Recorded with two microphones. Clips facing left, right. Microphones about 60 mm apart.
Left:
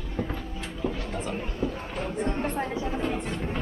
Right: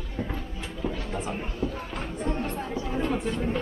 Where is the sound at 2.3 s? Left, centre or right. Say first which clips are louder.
Left 2 dB; left.